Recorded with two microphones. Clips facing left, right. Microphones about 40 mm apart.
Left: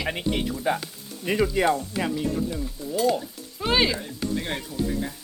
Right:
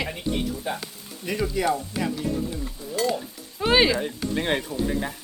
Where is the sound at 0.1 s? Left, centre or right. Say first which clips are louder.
Left 1 dB; left.